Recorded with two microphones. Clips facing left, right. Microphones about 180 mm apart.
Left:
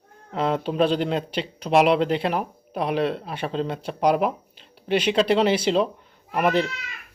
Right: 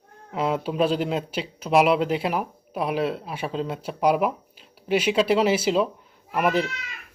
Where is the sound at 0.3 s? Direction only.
5° right (ahead or behind).